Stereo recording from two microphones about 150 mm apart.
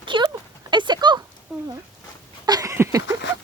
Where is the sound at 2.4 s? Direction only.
25° right (ahead or behind).